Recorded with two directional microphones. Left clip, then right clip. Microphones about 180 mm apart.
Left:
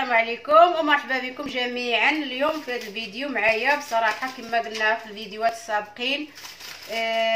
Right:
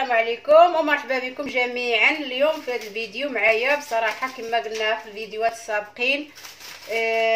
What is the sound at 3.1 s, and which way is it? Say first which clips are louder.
Speech: right 2 dB; 45° right (ahead or behind).